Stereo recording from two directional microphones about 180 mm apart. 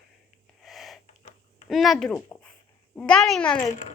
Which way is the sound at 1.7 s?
Centre (ahead or behind).